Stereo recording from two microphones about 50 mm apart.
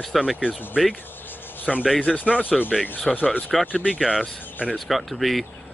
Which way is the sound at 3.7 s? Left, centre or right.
Left.